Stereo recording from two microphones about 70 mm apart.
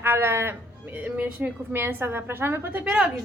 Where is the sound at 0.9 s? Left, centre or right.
Right.